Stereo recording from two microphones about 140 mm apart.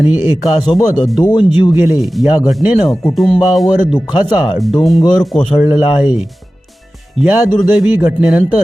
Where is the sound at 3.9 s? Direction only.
30° left (ahead or behind).